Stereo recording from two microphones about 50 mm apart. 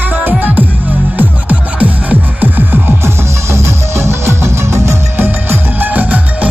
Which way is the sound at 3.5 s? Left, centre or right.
Right.